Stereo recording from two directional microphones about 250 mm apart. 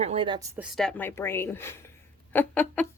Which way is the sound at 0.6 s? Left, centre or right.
Centre.